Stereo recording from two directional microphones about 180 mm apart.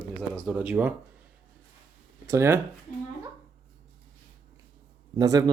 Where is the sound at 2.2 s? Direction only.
15° right (ahead or behind).